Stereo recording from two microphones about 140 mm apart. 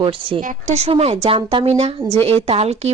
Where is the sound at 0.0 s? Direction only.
40° right (ahead or behind).